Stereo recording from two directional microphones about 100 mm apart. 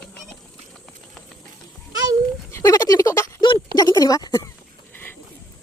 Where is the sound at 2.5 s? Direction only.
30° left (ahead or behind).